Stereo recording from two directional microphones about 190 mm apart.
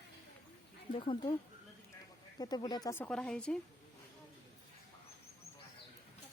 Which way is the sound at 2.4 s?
20° left (ahead or behind).